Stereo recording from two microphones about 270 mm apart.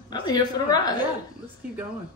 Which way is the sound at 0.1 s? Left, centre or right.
Centre.